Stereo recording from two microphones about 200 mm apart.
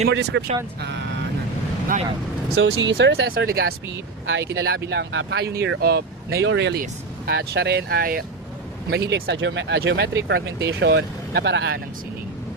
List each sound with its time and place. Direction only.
0.1 s speech: 60° right (ahead or behind)
2.6 s speech: 70° right (ahead or behind); by 3.6 s 50° right (ahead or behind)
4.3 s speech: 65° right (ahead or behind)
7.3 s speech: 55° right (ahead or behind)